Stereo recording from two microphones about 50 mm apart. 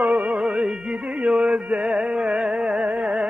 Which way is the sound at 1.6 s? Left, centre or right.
Right.